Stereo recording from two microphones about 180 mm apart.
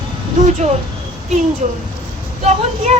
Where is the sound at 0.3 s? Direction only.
40° right (ahead or behind).